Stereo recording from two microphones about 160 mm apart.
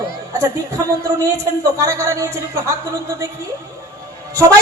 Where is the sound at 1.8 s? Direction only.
20° right (ahead or behind).